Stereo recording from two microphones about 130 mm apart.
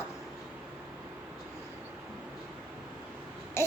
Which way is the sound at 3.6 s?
20° left (ahead or behind).